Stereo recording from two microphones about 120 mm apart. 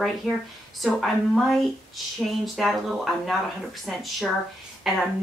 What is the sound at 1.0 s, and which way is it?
Speech, centre (ahead or behind).